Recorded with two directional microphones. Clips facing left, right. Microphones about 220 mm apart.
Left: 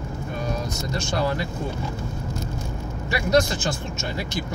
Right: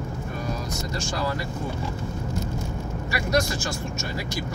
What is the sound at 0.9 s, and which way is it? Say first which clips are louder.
Speech: left 4 dB; 25° left (ahead or behind).